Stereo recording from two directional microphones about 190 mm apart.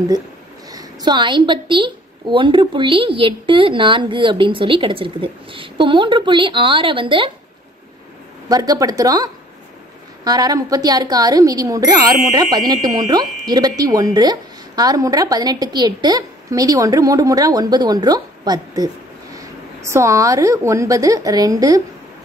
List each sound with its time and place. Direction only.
0.7 s a woman's voice: 20° right (ahead or behind)
8.5 s a woman's voice: 20° right (ahead or behind)